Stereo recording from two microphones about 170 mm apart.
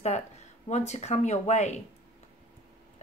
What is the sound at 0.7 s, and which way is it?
Speech, 40° left (ahead or behind).